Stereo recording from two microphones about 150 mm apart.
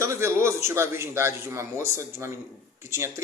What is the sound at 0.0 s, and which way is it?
A man's voice, 20° right (ahead or behind).